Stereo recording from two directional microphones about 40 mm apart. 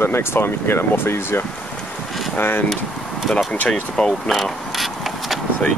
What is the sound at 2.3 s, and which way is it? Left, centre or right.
Speech, left.